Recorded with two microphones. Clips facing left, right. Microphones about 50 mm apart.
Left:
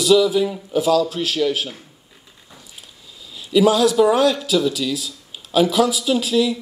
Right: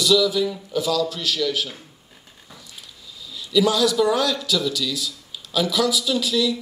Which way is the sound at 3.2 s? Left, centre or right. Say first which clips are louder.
Left 4 dB; left.